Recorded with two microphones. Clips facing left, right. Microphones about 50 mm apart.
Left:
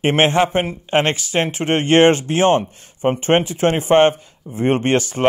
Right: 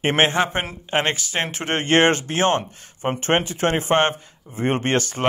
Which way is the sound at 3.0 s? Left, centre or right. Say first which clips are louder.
Left 6 dB; centre.